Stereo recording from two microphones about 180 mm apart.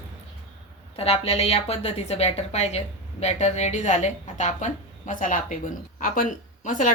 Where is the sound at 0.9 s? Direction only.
35° left (ahead or behind).